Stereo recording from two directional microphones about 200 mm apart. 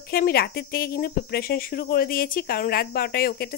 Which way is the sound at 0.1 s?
50° left (ahead or behind).